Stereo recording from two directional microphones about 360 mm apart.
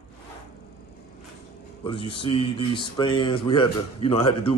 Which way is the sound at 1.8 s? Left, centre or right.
Centre.